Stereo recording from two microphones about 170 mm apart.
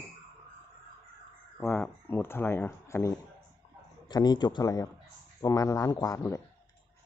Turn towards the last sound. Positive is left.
turn(degrees=15)  # may be behind; listen again after turning